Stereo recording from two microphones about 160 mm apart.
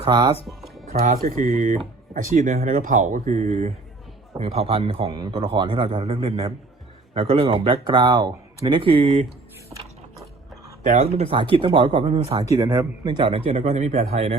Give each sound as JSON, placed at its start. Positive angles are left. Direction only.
{"t": 0.0, "sound": "speech", "side_deg": -25}
{"t": 0.4, "sound": "music", "side_deg": 0}
{"t": 1.0, "sound": "a man's voice", "side_deg": -65}
{"t": 10.8, "sound": "a man's voice", "side_deg": -45}
{"t": 12.5, "sound": "a man's voice", "side_deg": -20}